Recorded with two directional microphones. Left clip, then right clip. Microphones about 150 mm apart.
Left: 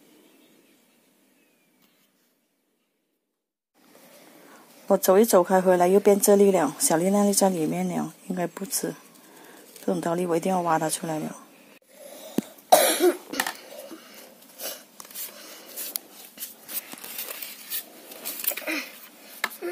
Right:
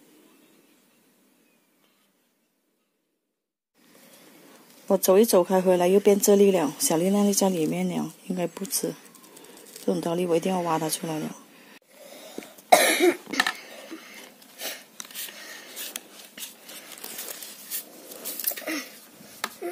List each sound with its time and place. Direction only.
4.8 s a woman's voice: 15° right (ahead or behind)
12.7 s cough: 55° right (ahead or behind)